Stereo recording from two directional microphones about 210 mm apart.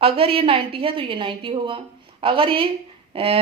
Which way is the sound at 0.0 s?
25° right (ahead or behind).